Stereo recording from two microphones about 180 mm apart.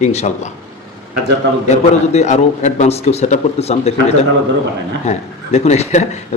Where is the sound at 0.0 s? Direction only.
40° left (ahead or behind).